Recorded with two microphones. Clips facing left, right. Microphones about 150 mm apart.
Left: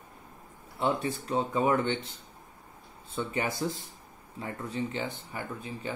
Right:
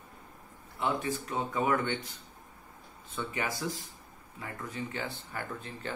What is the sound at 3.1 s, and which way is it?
Speech, 30° left (ahead or behind).